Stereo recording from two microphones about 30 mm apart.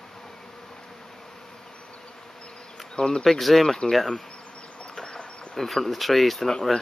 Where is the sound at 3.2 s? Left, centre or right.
Centre.